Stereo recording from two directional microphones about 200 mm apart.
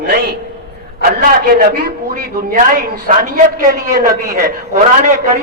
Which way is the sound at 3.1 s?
40° right (ahead or behind).